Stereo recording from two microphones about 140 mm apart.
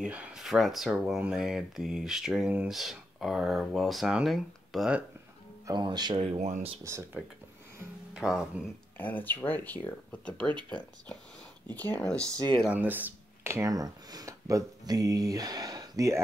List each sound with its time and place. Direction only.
0.0 s speech: 10° right (ahead or behind)
5.7 s speech: 30° right (ahead or behind)
6.1 s speech: 45° right (ahead or behind)
8.1 s speech: 5° right (ahead or behind)
8.9 s speech: 10° left (ahead or behind)
12.6 s speech: 10° right (ahead or behind)